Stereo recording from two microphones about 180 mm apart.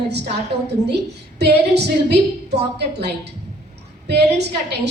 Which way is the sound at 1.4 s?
70° right (ahead or behind).